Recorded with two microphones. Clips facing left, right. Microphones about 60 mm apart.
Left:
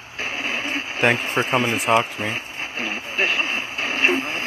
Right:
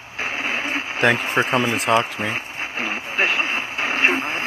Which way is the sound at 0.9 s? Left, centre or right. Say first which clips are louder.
Right 1 dB; right.